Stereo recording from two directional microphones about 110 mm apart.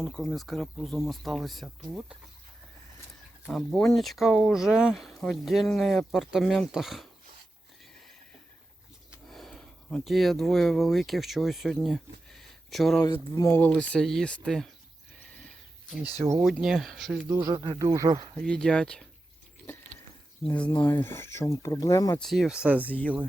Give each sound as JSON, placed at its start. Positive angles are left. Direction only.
{"t": 0.0, "sound": "speech", "side_deg": 5}
{"t": 3.5, "sound": "speech", "side_deg": 5}
{"t": 9.2, "sound": "speech", "side_deg": 0}
{"t": 13.3, "sound": "speech", "side_deg": 30}
{"t": 13.6, "sound": "speech", "side_deg": 10}
{"t": 16.1, "sound": "speech", "side_deg": -25}
{"t": 16.4, "sound": "speech", "side_deg": 0}
{"t": 17.2, "sound": "speech", "side_deg": -25}
{"t": 17.5, "sound": "speech", "side_deg": -40}
{"t": 18.3, "sound": "speech", "side_deg": 5}
{"t": 20.5, "sound": "speech", "side_deg": 15}
{"t": 22.2, "sound": "speech", "side_deg": 0}